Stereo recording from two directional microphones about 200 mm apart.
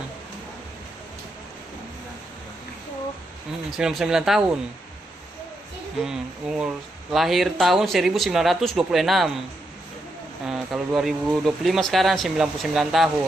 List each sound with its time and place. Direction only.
3.7 s speech: centre (ahead or behind)
6.1 s speech: 5° right (ahead or behind)
10.4 s speech: centre (ahead or behind)